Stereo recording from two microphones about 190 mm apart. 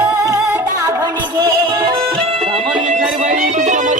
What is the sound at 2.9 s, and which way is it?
Music, 40° right (ahead or behind).